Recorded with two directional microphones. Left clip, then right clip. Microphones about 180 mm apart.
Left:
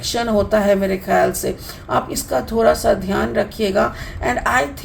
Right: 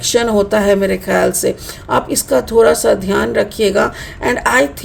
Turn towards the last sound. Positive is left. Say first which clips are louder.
# right 4 dB
turn(degrees=-50)  # may be behind; listen again after turning